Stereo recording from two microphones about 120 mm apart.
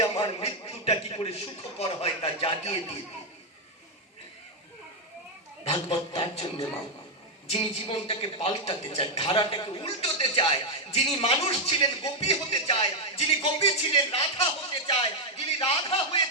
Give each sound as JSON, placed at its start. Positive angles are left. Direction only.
{"t": 0.0, "sound": "a man's voice", "side_deg": 55}
{"t": 5.6, "sound": "a man's voice", "side_deg": 55}
{"t": 9.8, "sound": "a man's voice", "side_deg": 50}